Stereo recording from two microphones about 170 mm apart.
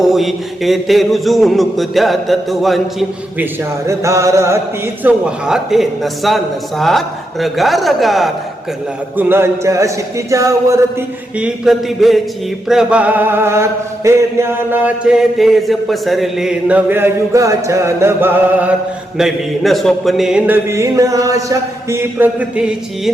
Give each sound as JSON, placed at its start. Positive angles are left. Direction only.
{"t": 0.0, "sound": "a man's voice", "side_deg": 0}
{"t": 5.0, "sound": "a man's voice", "side_deg": -5}
{"t": 9.1, "sound": "mantra", "side_deg": -15}
{"t": 11.3, "sound": "a man's voice", "side_deg": -5}
{"t": 12.6, "sound": "mantra", "side_deg": -5}
{"t": 19.1, "sound": "mantra", "side_deg": 0}